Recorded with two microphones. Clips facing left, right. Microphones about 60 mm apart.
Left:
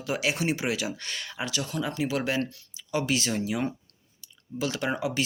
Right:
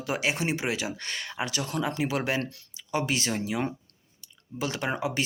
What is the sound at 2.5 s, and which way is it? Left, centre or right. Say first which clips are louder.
Speech: right 1 dB; right.